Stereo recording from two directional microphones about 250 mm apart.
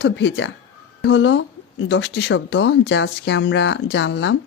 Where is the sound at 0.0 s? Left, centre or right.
Left.